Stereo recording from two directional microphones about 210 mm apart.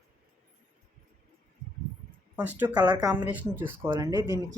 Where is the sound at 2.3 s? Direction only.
5° right (ahead or behind).